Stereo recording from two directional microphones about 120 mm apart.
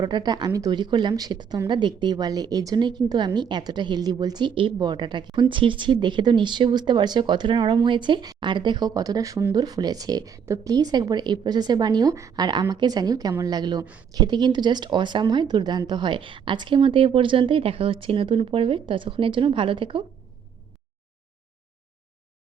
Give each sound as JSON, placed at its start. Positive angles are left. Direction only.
{"t": 0.0, "sound": "a woman's voice", "side_deg": -35}